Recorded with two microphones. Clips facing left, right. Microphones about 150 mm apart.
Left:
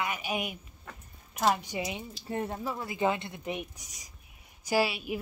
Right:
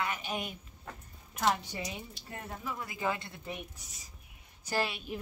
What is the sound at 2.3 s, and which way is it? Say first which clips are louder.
A woman's voice: left 8 dB; 30° left (ahead or behind).